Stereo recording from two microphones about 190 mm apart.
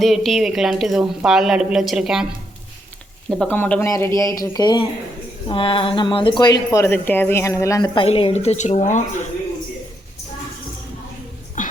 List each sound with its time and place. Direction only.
0.0 s a woman's voice: centre (ahead or behind)
3.2 s speech: 5° left (ahead or behind); by 9.2 s 40° left (ahead or behind)
11.6 s a sound: 45° left (ahead or behind)